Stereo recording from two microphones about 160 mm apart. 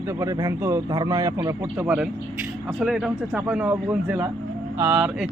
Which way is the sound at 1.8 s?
10° right (ahead or behind).